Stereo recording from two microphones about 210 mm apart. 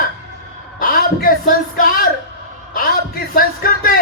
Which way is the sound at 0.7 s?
45° left (ahead or behind).